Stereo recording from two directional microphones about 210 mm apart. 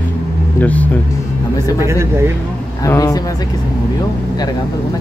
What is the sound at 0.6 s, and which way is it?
Speech, 5° left (ahead or behind).